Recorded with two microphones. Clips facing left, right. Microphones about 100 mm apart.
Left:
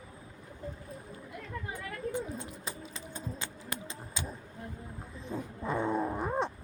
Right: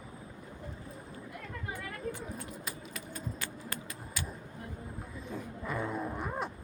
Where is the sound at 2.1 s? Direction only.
25° left (ahead or behind).